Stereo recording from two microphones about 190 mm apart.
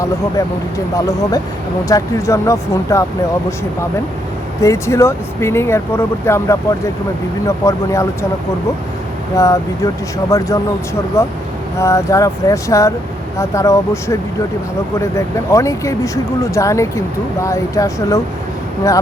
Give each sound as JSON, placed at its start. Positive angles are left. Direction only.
{"t": 0.9, "sound": "speech", "side_deg": 15}
{"t": 4.6, "sound": "speech", "side_deg": 15}
{"t": 9.3, "sound": "speech", "side_deg": 15}